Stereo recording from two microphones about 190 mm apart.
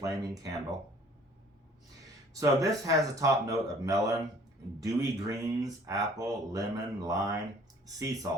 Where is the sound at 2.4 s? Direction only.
15° right (ahead or behind).